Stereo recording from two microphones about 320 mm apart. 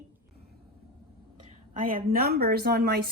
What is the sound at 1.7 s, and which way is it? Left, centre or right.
A woman's voice, right.